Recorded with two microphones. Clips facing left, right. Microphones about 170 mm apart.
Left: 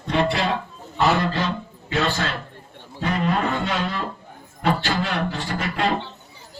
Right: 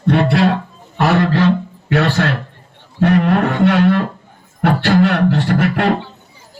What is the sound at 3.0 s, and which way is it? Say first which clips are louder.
Music: right 9 dB; 65° right (ahead or behind).